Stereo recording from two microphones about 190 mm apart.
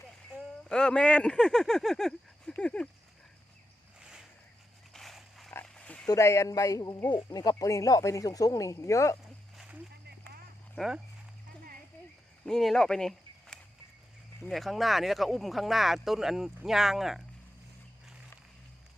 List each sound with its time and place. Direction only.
0.7 s speech: 5° left (ahead or behind)
4.9 s dog: centre (ahead or behind)
5.6 s a sound: 5° left (ahead or behind)
6.1 s a man's voice: 15° left (ahead or behind)
9.6 s a sound: 5° right (ahead or behind)
10.8 s speech: 5° right (ahead or behind)
12.5 s speech: 5° left (ahead or behind)